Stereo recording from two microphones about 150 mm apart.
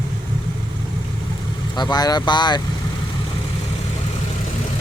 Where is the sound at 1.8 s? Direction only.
25° left (ahead or behind).